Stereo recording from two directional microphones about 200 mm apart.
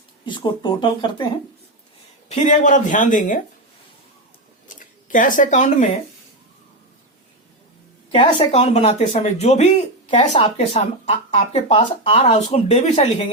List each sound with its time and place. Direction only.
0.3 s speech: 25° left (ahead or behind)
2.3 s speech: 35° left (ahead or behind)
4.8 s speech: 40° left (ahead or behind)
8.1 s speech: 25° left (ahead or behind)